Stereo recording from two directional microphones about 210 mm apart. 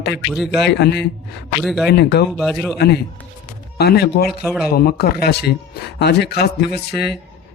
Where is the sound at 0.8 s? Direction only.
50° left (ahead or behind).